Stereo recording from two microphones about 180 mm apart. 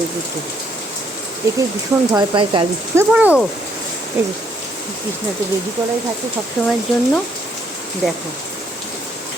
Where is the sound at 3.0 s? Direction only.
5° right (ahead or behind).